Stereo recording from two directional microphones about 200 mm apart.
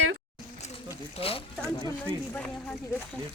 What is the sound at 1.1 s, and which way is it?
Speech, 30° left (ahead or behind).